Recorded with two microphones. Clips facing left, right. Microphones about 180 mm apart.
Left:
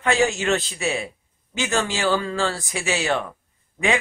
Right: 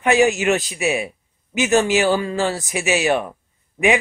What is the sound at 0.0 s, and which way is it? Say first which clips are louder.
A man's voice: right 5 dB; 15° right (ahead or behind).